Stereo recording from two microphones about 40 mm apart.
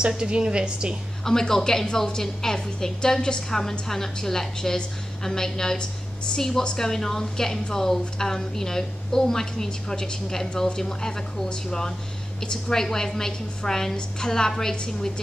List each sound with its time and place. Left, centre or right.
0.2 s a woman's voice: right
1.2 s a woman's voice: centre
6.6 s a woman's voice: left
6.9 s a woman's voice: centre